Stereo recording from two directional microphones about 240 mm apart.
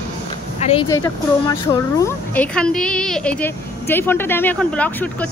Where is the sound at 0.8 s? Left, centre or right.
Centre.